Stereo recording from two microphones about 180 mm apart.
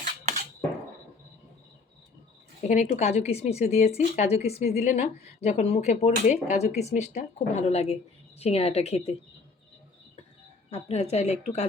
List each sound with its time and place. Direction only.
2.6 s speech: 40° left (ahead or behind)
10.7 s speech: 35° left (ahead or behind)